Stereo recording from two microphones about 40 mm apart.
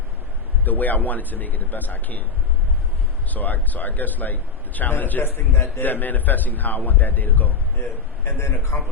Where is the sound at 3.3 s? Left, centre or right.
Left.